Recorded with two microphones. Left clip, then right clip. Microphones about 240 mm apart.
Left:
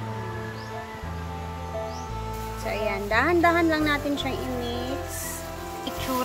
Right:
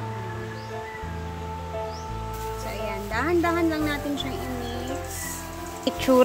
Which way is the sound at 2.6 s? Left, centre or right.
Centre.